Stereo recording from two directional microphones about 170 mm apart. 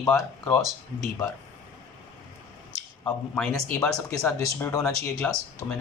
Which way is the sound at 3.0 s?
5° left (ahead or behind).